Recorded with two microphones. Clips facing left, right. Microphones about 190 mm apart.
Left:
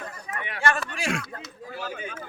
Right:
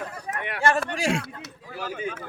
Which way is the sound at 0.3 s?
65° right (ahead or behind).